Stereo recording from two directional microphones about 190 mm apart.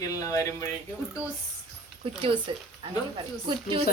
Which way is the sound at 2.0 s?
30° right (ahead or behind).